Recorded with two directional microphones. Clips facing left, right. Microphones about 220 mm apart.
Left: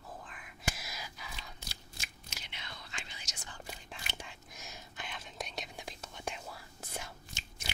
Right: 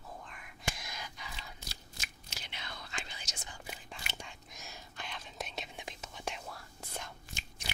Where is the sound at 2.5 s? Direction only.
35° right (ahead or behind).